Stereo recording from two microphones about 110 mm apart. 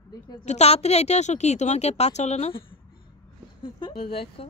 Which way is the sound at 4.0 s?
60° left (ahead or behind).